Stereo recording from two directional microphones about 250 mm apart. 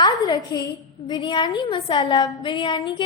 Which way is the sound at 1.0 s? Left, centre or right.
Centre.